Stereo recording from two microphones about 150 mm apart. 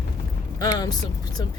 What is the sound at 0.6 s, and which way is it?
Speech, 25° left (ahead or behind).